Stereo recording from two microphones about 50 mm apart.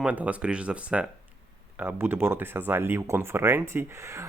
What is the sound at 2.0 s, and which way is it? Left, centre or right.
Speech, right.